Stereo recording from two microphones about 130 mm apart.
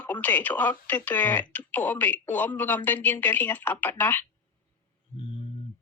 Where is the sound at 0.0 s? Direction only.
15° left (ahead or behind).